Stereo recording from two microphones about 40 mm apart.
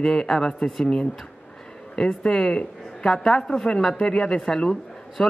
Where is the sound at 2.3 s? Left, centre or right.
Centre.